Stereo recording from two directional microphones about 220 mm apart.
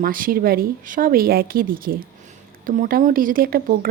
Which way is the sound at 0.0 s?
40° right (ahead or behind).